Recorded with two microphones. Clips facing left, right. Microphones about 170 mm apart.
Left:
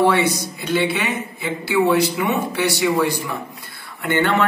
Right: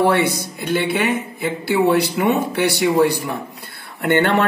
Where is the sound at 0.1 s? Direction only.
55° right (ahead or behind).